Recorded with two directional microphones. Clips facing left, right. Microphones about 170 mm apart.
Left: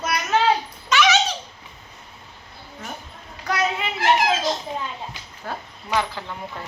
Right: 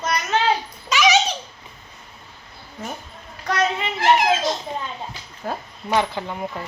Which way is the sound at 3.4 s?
5° left (ahead or behind).